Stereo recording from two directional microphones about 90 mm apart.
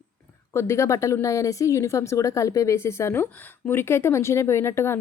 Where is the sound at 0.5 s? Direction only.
30° left (ahead or behind).